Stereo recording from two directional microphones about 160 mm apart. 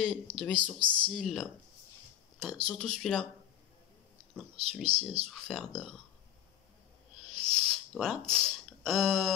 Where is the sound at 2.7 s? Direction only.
5° left (ahead or behind).